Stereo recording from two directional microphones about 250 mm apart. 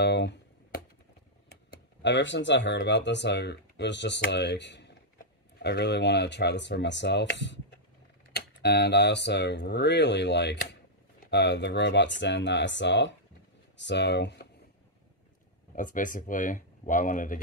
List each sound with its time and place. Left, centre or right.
0.0 s a sound: left
2.0 s speech: left
15.7 s speech: left